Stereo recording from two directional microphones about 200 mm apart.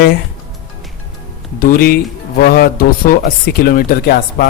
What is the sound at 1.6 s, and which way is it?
Speech, 50° left (ahead or behind).